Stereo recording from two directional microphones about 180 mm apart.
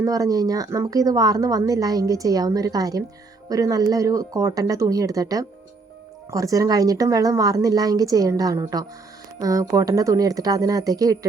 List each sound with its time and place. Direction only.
0.0 s speech: 20° right (ahead or behind)